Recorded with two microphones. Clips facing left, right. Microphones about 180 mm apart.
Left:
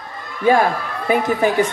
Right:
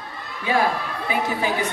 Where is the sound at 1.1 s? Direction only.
50° left (ahead or behind).